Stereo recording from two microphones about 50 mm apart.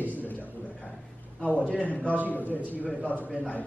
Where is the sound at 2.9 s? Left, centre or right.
Left.